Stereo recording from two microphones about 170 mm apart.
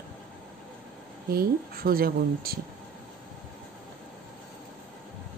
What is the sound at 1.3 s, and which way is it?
Speech, 60° right (ahead or behind).